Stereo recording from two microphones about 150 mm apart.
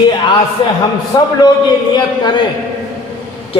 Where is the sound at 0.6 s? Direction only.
35° left (ahead or behind).